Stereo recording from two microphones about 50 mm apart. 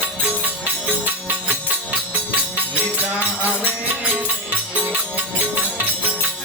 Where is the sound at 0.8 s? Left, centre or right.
Right.